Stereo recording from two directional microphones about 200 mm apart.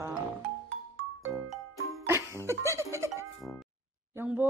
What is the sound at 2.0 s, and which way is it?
Music, 15° right (ahead or behind).